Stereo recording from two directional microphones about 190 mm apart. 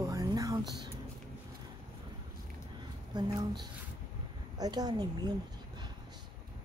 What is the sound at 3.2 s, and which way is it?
Speech, 20° right (ahead or behind).